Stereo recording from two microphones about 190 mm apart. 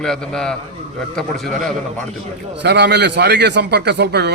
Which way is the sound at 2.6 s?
60° right (ahead or behind).